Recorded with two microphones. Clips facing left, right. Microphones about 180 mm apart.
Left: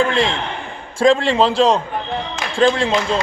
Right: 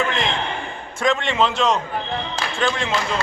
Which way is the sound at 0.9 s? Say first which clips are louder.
Left 6 dB; 30° left (ahead or behind).